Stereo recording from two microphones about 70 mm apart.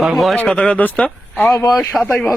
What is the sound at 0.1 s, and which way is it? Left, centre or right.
Speech, centre.